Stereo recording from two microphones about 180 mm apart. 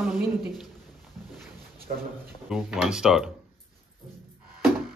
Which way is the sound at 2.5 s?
5° right (ahead or behind).